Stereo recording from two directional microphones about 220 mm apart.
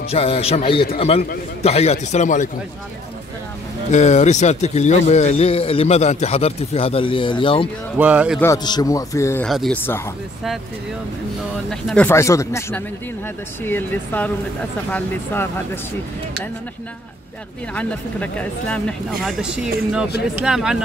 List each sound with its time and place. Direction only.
0.1 s a man's voice: 25° left (ahead or behind)
3.9 s a man's voice: 30° left (ahead or behind)
8.0 s speech: 5° right (ahead or behind)
8.4 s a man's voice: 15° left (ahead or behind)
9.5 s speech: centre (ahead or behind)
11.7 s a man's voice: 5° left (ahead or behind)
17.7 s speech: 5° left (ahead or behind)